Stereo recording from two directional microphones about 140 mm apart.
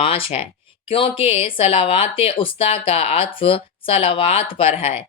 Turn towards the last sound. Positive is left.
turn(degrees=40)  # may be behind; listen again after turning